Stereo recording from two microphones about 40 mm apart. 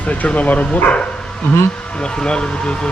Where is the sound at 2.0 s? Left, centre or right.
Left.